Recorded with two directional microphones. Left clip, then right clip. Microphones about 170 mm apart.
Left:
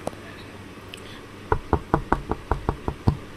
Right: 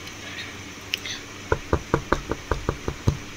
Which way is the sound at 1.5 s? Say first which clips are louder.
Left 1 dB; 35° left (ahead or behind).